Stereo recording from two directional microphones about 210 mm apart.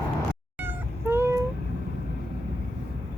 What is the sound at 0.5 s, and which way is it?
Cat, 10° right (ahead or behind).